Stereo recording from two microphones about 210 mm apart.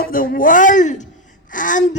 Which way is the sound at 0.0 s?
45° left (ahead or behind).